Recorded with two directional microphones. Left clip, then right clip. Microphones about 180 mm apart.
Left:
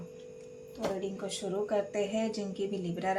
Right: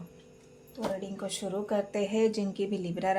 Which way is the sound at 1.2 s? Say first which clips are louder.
Right 2 dB; 45° right (ahead or behind).